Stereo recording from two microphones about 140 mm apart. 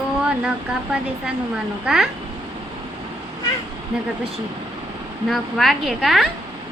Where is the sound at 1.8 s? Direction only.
5° right (ahead or behind).